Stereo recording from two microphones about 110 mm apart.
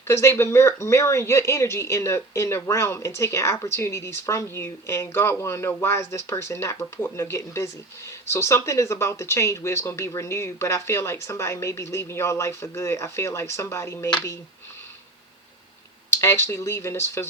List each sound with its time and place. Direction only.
0.1 s speech: 25° left (ahead or behind)
16.0 s speech: 25° left (ahead or behind)